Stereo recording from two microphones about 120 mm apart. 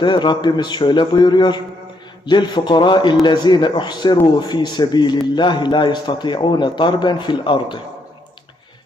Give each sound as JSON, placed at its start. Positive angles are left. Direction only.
{"t": 0.0, "sound": "a man's voice", "side_deg": 40}